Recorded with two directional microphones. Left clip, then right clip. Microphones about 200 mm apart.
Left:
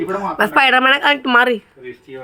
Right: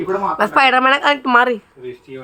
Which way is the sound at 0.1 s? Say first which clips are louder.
Right 1 dB; 10° left (ahead or behind).